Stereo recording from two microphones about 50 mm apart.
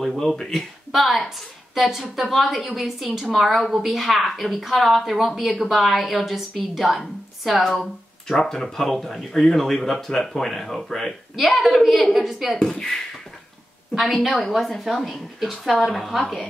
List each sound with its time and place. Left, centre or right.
0.0 s a woman's voice: centre
13.9 s a woman's voice: centre